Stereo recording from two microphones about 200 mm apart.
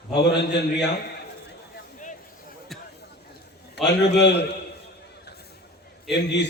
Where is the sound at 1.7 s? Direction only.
40° left (ahead or behind).